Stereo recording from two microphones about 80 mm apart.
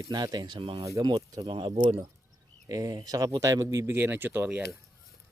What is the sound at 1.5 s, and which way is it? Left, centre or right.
Speech, right.